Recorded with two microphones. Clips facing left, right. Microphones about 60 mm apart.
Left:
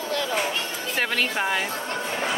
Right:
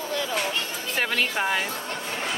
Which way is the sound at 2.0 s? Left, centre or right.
Centre.